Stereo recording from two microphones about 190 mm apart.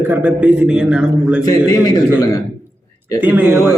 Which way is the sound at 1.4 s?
20° left (ahead or behind).